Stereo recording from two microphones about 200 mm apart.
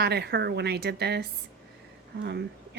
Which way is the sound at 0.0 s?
55° right (ahead or behind).